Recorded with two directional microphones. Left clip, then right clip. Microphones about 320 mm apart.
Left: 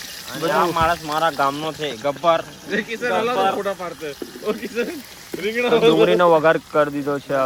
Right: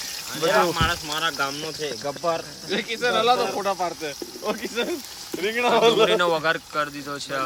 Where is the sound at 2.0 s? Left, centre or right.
Left.